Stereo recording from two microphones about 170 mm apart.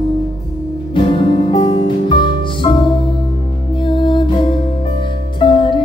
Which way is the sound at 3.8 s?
30° left (ahead or behind).